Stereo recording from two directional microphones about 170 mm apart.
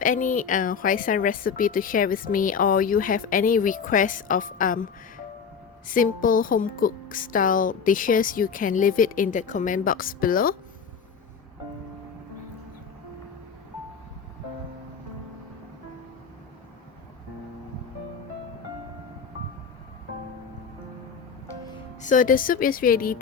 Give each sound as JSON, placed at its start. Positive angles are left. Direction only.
{"t": 0.0, "sound": "speech", "side_deg": 50}
{"t": 22.0, "sound": "a woman's voice", "side_deg": 50}